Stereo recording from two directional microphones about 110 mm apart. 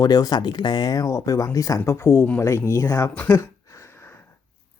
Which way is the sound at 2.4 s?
25° left (ahead or behind).